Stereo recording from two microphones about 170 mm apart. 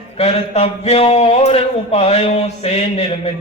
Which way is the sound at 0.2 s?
35° left (ahead or behind).